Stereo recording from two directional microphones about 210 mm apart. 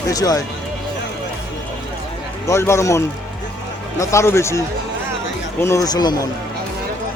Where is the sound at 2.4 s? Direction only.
15° left (ahead or behind).